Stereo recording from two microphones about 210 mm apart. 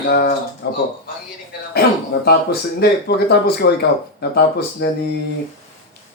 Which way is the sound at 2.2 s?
50° left (ahead or behind).